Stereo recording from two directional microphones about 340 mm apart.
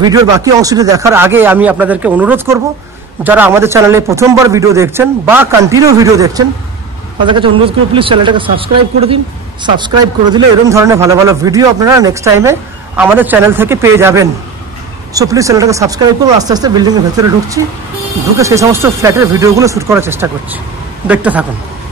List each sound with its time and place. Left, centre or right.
0.0 s a man's voice: centre